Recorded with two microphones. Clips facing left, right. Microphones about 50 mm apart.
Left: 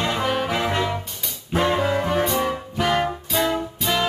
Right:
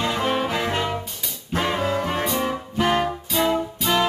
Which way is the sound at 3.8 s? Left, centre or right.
Centre.